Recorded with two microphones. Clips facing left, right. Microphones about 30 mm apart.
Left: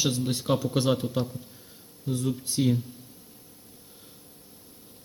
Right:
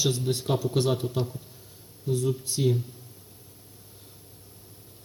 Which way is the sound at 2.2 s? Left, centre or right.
Left.